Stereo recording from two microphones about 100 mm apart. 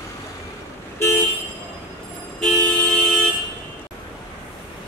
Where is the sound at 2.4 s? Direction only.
15° left (ahead or behind).